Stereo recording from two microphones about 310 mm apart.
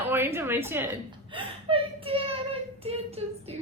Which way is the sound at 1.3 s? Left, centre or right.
Centre.